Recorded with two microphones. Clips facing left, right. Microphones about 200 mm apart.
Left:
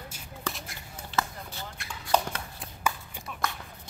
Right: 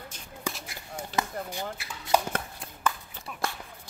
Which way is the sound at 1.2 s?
15° right (ahead or behind).